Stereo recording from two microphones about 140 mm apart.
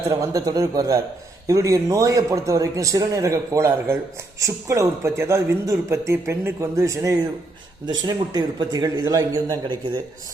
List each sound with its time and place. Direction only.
0.2 s a man's voice: 25° right (ahead or behind)